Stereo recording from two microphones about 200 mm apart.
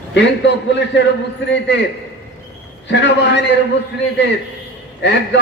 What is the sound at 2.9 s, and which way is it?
Speech, 60° left (ahead or behind).